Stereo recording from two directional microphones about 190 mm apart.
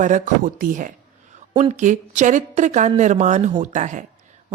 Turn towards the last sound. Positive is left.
turn(degrees=-40)  # may be behind; listen again after turning